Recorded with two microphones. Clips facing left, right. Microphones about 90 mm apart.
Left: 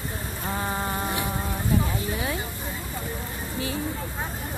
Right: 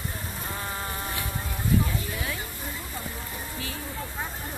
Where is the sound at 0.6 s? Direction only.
25° left (ahead or behind).